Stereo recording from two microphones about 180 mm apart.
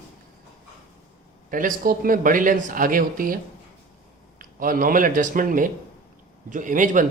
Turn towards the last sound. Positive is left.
turn(degrees=-45)  # may be behind; listen again after turning